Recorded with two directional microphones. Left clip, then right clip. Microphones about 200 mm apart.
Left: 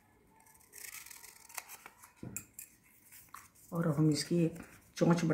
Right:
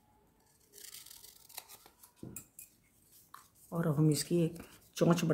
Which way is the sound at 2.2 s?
10° left (ahead or behind).